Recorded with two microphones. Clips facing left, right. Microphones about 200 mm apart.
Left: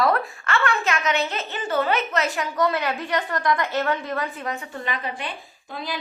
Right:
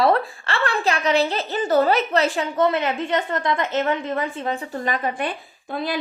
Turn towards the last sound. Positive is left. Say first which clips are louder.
# right 6 dB
turn(degrees=-55)  # may be behind; listen again after turning